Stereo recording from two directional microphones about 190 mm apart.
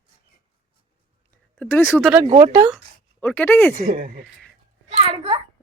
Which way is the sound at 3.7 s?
45° right (ahead or behind).